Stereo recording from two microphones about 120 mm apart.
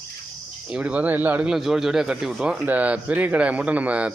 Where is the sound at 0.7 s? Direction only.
10° right (ahead or behind).